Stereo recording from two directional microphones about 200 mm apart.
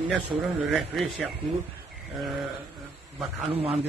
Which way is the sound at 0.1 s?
Centre (ahead or behind).